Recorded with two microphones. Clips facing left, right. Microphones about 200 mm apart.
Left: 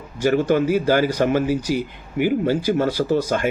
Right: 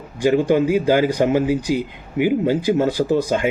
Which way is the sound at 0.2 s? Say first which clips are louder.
Right 2 dB; 15° right (ahead or behind).